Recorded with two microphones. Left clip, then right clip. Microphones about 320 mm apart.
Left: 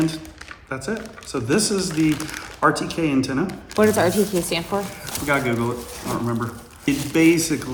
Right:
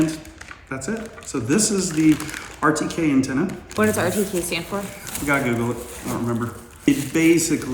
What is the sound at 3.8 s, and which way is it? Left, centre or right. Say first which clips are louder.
Speech: left 3 dB; left.